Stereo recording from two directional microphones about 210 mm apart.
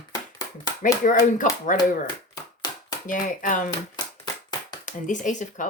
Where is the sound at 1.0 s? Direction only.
35° left (ahead or behind).